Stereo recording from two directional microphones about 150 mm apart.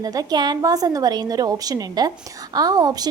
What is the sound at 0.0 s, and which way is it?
A woman's voice, 25° right (ahead or behind).